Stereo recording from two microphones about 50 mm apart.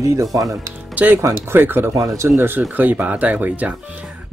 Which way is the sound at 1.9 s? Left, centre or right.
Right.